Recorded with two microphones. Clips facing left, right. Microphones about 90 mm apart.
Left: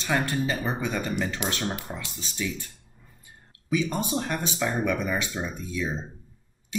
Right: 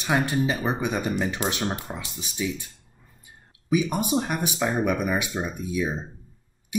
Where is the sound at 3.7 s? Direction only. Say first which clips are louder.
Right 3 dB; 15° right (ahead or behind).